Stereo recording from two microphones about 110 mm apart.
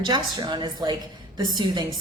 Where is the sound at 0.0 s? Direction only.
45° right (ahead or behind).